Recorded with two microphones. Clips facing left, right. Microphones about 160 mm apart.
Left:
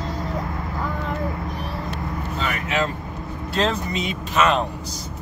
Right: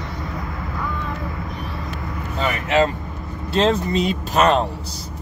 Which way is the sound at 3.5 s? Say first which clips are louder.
Right 5 dB; 25° right (ahead or behind).